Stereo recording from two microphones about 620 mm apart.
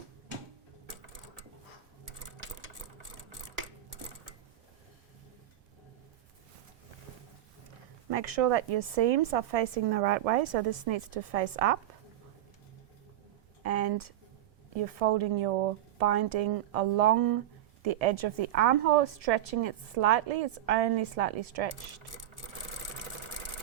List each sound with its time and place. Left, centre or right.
8.1 s a woman's voice: right
13.6 s a sound: right
14.8 s a woman's voice: right